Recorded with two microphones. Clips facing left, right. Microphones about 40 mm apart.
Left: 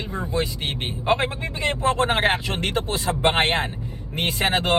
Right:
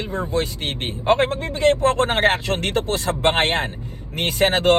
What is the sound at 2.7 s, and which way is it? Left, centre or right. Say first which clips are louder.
Speech: right 3 dB; left.